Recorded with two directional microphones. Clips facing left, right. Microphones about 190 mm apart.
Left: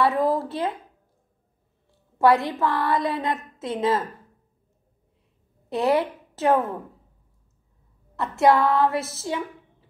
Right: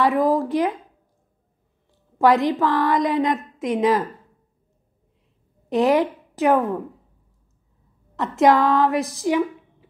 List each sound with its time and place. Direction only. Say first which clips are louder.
0.0 s a woman's voice: right 3 dB; 15° right (ahead or behind)
2.1 s a woman's voice: right 2 dB; 15° right (ahead or behind)
5.7 s a woman's voice: right 4 dB; 15° right (ahead or behind)
8.2 s a woman's voice: right 2 dB; 15° right (ahead or behind)